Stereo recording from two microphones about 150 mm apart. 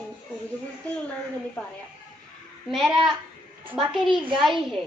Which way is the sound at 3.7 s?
Centre (ahead or behind).